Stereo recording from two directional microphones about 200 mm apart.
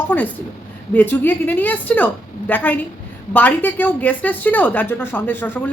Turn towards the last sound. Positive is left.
turn(degrees=10)  # may be behind; listen again after turning